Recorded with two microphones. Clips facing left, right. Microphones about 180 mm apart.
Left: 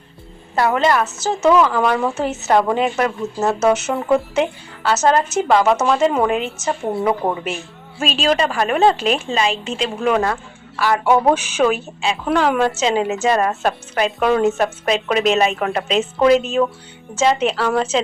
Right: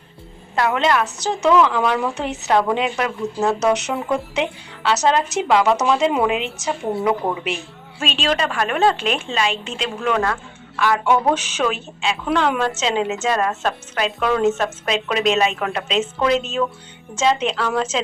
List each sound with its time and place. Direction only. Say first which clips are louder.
0.5 s speech: left 2 dB; 5° left (ahead or behind)
9.2 s a woman's voice: left 3 dB; 40° left (ahead or behind)
10.0 s a woman's voice: left 2 dB; 10° left (ahead or behind)